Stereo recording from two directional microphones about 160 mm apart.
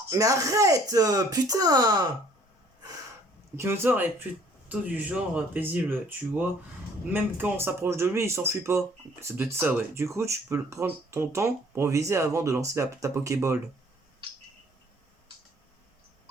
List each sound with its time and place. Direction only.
0.1 s speech: 20° right (ahead or behind)
3.5 s speech: 15° right (ahead or behind)